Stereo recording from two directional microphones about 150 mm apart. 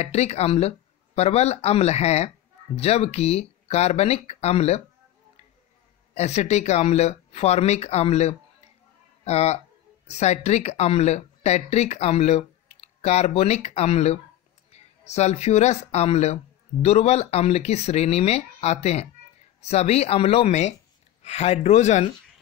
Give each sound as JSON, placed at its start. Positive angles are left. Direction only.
{"t": 0.0, "sound": "speech", "side_deg": 45}
{"t": 6.1, "sound": "speech", "side_deg": 45}